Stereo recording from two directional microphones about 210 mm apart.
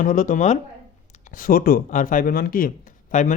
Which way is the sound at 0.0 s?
40° left (ahead or behind).